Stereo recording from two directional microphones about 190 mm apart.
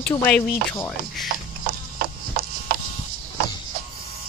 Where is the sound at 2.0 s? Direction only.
50° right (ahead or behind).